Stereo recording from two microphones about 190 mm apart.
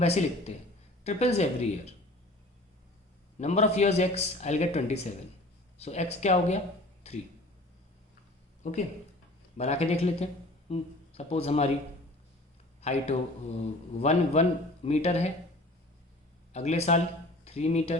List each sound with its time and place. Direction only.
0.0 s a man's voice: 35° left (ahead or behind)
3.3 s a man's voice: 35° left (ahead or behind)
8.6 s a man's voice: 40° left (ahead or behind)
12.8 s a man's voice: 35° left (ahead or behind)
16.5 s a man's voice: 35° left (ahead or behind)